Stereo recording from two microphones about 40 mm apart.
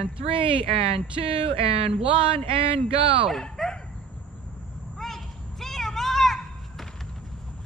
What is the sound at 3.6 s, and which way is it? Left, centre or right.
Dog, centre.